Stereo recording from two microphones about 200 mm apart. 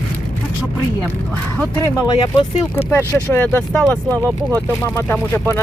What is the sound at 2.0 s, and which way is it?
Speech, 20° left (ahead or behind).